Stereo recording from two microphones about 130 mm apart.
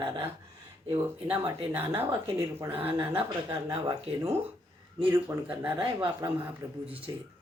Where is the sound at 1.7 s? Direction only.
15° right (ahead or behind).